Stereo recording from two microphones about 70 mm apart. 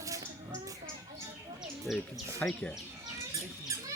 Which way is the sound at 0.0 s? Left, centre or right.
Right.